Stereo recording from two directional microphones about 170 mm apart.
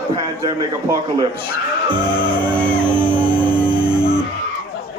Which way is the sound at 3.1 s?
30° right (ahead or behind).